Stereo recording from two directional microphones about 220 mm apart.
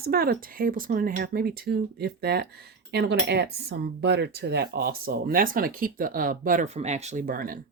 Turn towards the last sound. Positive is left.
turn(degrees=-40)  # may be behind; listen again after turning